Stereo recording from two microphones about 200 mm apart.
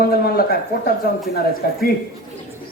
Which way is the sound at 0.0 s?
50° left (ahead or behind).